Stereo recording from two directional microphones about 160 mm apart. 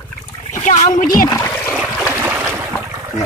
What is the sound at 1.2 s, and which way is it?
Splash, 20° left (ahead or behind).